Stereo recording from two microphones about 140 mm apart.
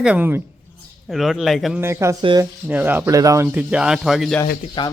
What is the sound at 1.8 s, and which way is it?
Speech, 20° right (ahead or behind).